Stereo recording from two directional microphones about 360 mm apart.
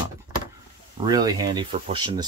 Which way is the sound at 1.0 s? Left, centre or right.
Centre.